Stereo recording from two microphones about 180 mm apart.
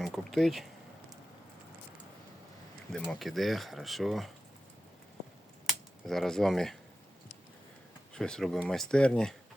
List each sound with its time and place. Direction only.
0.0 s a sound: centre (ahead or behind)
2.9 s speech: centre (ahead or behind)
5.6 s speech: centre (ahead or behind)
8.1 s speech: 5° left (ahead or behind)